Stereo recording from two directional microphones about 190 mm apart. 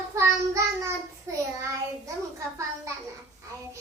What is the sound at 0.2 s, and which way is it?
Child singing, 15° right (ahead or behind).